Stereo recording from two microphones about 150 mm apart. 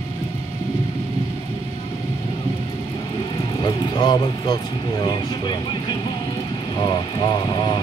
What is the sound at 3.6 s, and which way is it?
Speech, 30° left (ahead or behind).